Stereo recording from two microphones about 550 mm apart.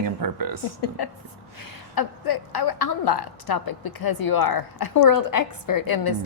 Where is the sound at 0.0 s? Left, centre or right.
Right.